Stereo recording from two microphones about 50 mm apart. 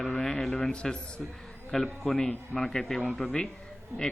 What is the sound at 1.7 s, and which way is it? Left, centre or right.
A man's voice, centre.